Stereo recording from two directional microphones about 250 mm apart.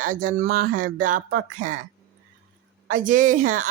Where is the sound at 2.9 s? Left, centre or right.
Right.